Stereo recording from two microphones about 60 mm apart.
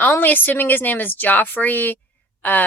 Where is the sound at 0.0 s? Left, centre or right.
Left.